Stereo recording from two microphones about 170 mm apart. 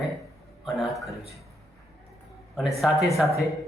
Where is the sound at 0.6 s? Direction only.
Centre (ahead or behind).